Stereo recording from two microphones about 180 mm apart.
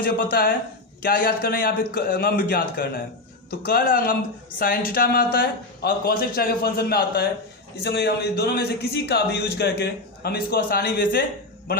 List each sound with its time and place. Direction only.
0.0 s a man's voice: 55° left (ahead or behind)